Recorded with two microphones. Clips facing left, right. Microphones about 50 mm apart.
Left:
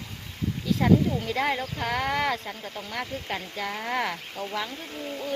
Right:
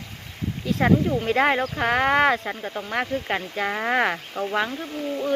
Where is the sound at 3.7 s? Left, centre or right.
Right.